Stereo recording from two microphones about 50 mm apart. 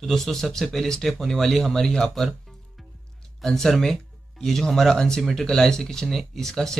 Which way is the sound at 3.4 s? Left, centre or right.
Centre.